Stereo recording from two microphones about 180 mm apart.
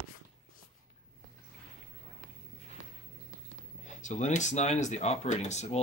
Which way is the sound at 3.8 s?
40° left (ahead or behind).